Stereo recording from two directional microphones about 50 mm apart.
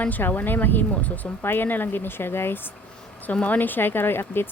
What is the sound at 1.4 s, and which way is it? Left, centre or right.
Speech, left.